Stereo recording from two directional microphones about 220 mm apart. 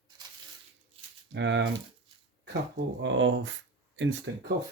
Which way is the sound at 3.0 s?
60° right (ahead or behind).